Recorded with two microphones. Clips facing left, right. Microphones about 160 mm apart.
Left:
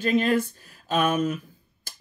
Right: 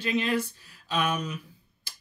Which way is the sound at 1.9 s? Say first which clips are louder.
Left 3 dB; 45° left (ahead or behind).